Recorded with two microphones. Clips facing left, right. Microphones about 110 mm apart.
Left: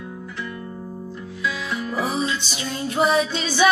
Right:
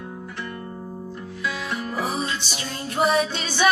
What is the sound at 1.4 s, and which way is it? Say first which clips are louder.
Music: left 2 dB; 50° right (ahead or behind).